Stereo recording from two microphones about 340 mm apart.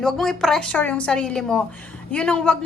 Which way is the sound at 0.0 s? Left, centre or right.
Centre.